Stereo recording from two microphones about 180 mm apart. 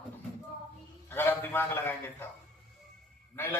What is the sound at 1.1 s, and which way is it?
Speech, 10° left (ahead or behind).